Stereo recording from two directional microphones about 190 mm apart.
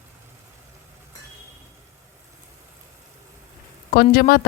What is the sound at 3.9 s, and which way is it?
Speech, 50° left (ahead or behind).